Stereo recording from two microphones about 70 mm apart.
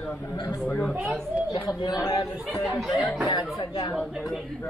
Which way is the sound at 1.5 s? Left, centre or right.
Left.